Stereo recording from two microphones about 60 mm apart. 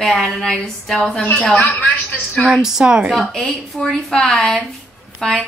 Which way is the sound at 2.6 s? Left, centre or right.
Centre.